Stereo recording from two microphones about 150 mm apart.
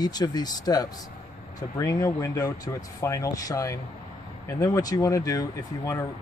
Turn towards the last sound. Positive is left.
turn(degrees=20)  # may be behind; listen again after turning